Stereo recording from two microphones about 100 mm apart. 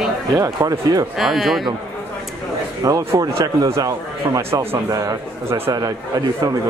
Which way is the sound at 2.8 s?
35° right (ahead or behind).